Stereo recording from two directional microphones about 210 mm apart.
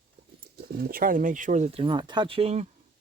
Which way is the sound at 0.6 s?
45° right (ahead or behind).